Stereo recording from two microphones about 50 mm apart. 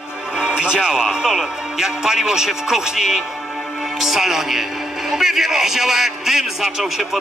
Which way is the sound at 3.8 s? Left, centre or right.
Centre.